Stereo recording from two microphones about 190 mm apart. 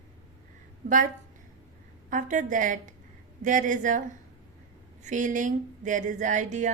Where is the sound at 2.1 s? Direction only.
45° right (ahead or behind).